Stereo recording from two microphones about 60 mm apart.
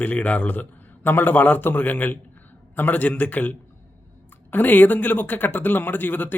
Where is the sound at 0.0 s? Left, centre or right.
Left.